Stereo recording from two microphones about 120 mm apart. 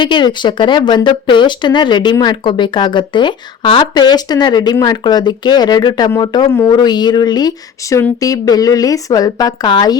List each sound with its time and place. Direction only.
0.0 s speech: 40° left (ahead or behind)